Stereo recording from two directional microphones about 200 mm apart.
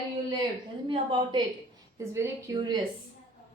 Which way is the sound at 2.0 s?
15° right (ahead or behind).